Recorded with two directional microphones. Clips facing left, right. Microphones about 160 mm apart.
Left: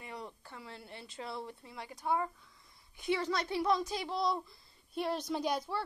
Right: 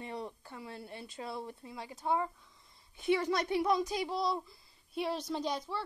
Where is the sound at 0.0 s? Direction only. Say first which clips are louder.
Right 4 dB; 25° right (ahead or behind).